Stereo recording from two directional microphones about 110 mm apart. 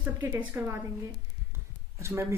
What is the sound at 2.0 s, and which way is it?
Speech, 25° right (ahead or behind).